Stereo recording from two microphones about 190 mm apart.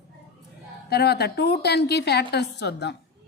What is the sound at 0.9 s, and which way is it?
A woman's voice, 60° left (ahead or behind).